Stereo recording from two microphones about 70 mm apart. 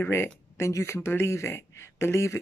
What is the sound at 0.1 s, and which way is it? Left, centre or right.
Speech, left.